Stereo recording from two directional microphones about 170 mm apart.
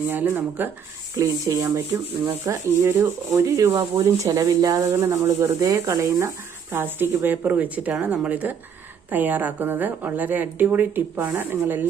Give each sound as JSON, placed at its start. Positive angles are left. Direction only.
{"t": 0.1, "sound": "rub", "side_deg": -10}
{"t": 1.1, "sound": "speech", "side_deg": -20}
{"t": 2.4, "sound": "rub", "side_deg": -15}